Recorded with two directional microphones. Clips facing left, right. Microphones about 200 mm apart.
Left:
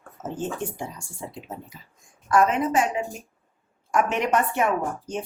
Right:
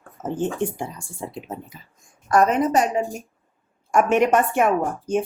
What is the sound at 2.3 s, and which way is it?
A woman's voice, 40° right (ahead or behind).